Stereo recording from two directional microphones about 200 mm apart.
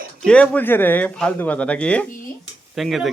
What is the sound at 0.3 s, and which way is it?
Speech, 5° left (ahead or behind).